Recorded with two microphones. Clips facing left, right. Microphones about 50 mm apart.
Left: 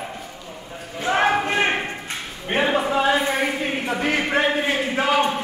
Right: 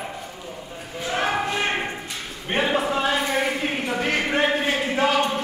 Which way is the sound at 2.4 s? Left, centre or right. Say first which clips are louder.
Left 2 dB; centre.